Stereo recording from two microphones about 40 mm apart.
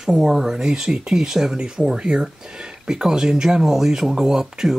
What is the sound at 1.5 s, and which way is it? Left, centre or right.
Speech, right.